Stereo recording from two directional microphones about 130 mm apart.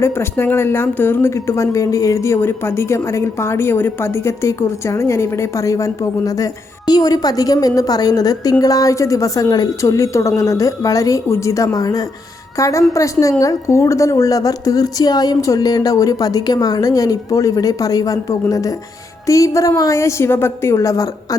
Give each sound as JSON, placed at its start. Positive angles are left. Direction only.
{"t": 0.0, "sound": "speech", "side_deg": 20}